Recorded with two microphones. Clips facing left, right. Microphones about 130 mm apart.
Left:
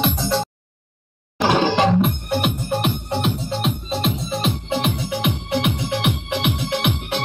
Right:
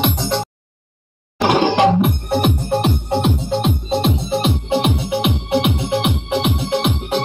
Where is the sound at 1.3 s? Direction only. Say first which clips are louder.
Right 3 dB; 10° right (ahead or behind).